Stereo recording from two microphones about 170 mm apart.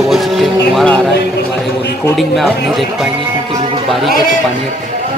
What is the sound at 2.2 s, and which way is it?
Speech, centre (ahead or behind).